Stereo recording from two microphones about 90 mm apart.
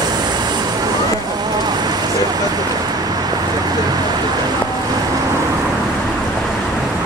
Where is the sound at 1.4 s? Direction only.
50° right (ahead or behind).